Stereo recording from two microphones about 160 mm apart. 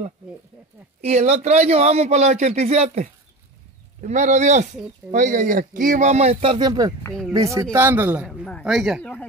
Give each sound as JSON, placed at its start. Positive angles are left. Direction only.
{"t": 1.0, "sound": "a man's voice", "side_deg": -45}
{"t": 7.1, "sound": "speech", "side_deg": 0}
{"t": 7.3, "sound": "a man's voice", "side_deg": -20}
{"t": 8.3, "sound": "speech", "side_deg": 5}